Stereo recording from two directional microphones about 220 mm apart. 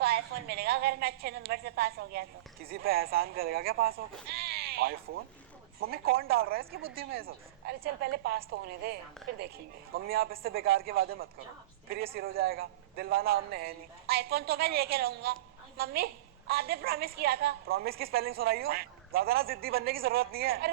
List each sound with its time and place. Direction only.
0.0 s a woman's voice: 45° right (ahead or behind)
4.3 s sheep: 45° right (ahead or behind)
5.8 s a woman's voice: 45° right (ahead or behind)
10.1 s a woman's voice: 45° right (ahead or behind)